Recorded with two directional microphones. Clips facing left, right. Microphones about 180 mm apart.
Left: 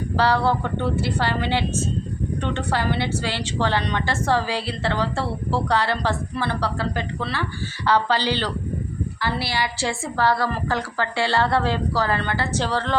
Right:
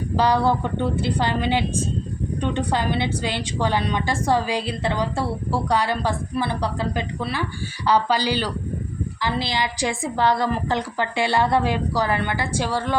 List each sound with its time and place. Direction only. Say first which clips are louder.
0.2 s a woman's voice: right 1 dB; 15° right (ahead or behind)